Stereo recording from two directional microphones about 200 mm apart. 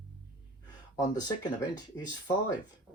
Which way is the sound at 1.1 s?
20° left (ahead or behind).